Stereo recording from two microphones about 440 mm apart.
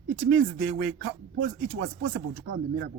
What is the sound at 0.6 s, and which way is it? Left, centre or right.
Speech, right.